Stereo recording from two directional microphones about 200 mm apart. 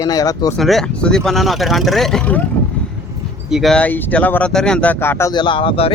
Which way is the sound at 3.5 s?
Centre (ahead or behind).